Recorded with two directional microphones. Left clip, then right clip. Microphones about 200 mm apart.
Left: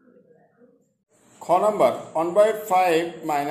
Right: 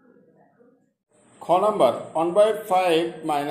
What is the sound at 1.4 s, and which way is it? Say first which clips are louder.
A man's voice: even; 5° right (ahead or behind).